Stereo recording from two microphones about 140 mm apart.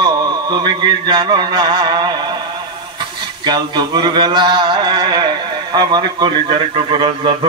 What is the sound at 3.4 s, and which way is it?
Speech, 30° right (ahead or behind).